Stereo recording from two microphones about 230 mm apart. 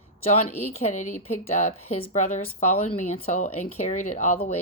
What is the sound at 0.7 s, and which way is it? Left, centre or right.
A woman's voice, left.